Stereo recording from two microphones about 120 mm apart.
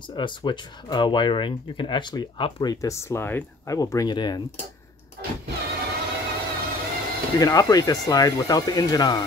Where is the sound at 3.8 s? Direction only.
30° left (ahead or behind).